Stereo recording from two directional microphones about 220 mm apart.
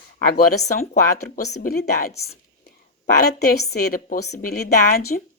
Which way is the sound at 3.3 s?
50° left (ahead or behind).